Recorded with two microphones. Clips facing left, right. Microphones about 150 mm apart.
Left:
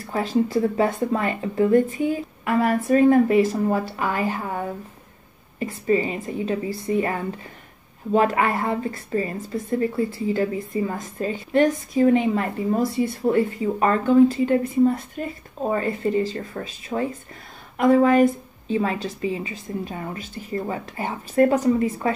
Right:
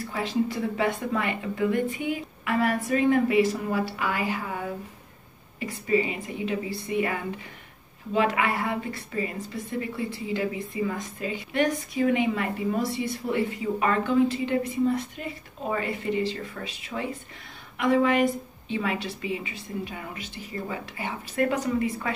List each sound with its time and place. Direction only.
0.1 s a woman's voice: 45° left (ahead or behind)
5.6 s a woman's voice: 40° left (ahead or behind)